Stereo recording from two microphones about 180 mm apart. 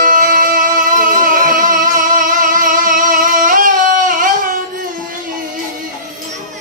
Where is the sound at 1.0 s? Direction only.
50° right (ahead or behind).